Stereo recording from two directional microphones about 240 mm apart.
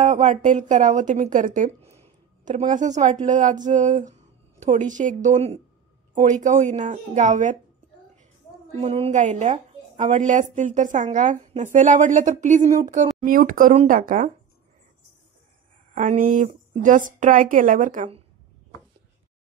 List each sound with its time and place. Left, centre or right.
0.0 s speech: right
6.4 s speech: right
8.7 s speech: right
15.9 s speech: right